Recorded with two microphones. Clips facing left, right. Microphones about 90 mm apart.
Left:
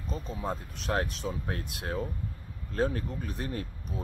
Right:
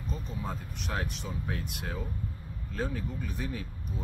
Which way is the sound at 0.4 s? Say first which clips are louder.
Left 3 dB; 35° left (ahead or behind).